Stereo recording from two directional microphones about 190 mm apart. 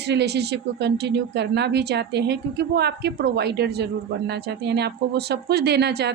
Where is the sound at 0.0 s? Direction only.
60° right (ahead or behind).